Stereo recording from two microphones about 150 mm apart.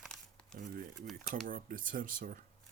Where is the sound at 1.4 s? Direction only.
70° right (ahead or behind).